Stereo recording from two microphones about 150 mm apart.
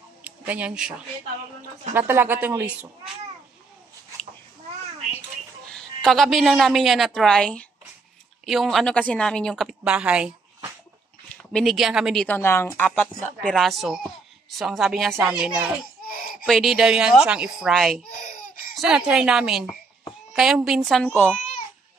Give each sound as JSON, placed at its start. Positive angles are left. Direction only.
{"t": 0.2, "sound": "speech", "side_deg": -10}
{"t": 5.7, "sound": "a woman's voice", "side_deg": 5}
{"t": 11.5, "sound": "a woman's voice", "side_deg": 0}
{"t": 12.4, "sound": "a woman's voice", "side_deg": 15}
{"t": 13.5, "sound": "a woman's voice", "side_deg": 0}
{"t": 18.2, "sound": "laughter", "side_deg": 55}
{"t": 18.8, "sound": "a woman's voice", "side_deg": -5}
{"t": 21.1, "sound": "a woman's voice", "side_deg": 10}